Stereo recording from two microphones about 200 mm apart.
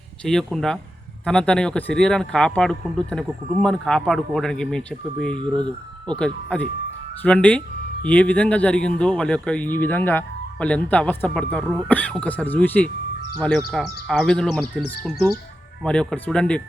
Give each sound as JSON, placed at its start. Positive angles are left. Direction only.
{"t": 0.3, "sound": "speech", "side_deg": 0}
{"t": 5.3, "sound": "speech", "side_deg": -20}
{"t": 6.1, "sound": "speech", "side_deg": 5}